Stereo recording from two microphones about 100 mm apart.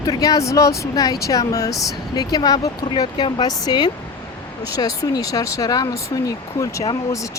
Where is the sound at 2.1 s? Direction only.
45° left (ahead or behind).